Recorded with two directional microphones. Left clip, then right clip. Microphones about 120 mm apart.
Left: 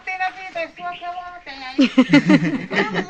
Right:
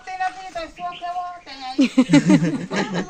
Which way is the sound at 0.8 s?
20° right (ahead or behind).